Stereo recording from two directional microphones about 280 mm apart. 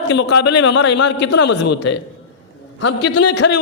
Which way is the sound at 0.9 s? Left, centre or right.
Left.